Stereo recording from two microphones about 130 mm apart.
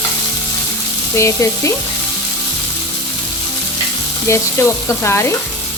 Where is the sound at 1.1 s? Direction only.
20° left (ahead or behind).